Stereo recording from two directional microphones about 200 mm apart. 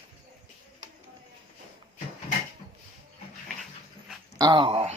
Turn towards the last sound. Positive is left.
turn(degrees=-30)  # may be behind; listen again after turning